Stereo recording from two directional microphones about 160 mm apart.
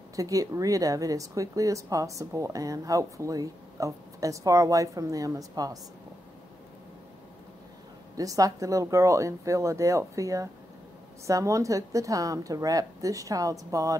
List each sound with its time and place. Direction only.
0.1 s speech: 20° right (ahead or behind)
8.2 s speech: 20° right (ahead or behind)